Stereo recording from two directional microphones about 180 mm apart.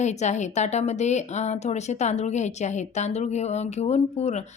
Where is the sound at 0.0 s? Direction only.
40° left (ahead or behind).